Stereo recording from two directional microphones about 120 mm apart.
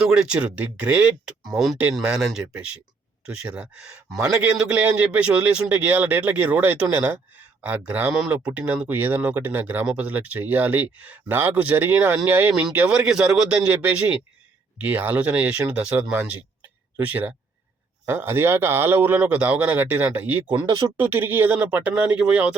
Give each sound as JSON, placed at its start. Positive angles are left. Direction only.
{"t": 0.0, "sound": "speech", "side_deg": -5}
{"t": 20.6, "sound": "speech", "side_deg": -30}
{"t": 20.9, "sound": "speech", "side_deg": -15}